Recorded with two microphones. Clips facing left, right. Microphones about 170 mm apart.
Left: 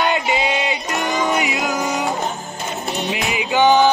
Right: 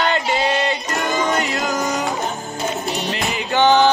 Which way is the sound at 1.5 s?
Centre (ahead or behind).